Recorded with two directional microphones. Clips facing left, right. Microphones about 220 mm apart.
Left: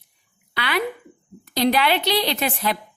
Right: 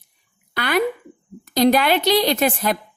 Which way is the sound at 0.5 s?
45° right (ahead or behind).